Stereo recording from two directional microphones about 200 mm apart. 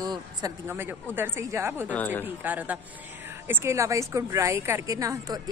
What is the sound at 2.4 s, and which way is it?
A woman's voice, 10° right (ahead or behind).